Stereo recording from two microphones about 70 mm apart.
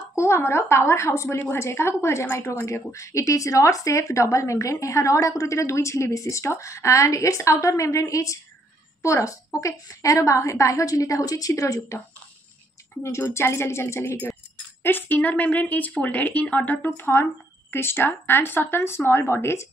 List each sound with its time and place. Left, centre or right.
0.1 s a woman's voice: left
13.0 s a woman's voice: left
14.8 s a woman's voice: left